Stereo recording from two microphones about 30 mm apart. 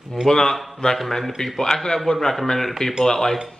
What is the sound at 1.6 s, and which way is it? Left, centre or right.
Cutlery, centre.